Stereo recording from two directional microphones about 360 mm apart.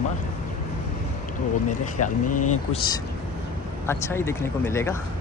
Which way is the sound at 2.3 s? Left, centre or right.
Left.